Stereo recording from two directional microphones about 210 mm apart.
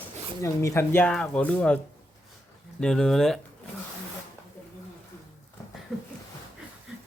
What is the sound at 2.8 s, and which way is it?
Speech, 5° left (ahead or behind).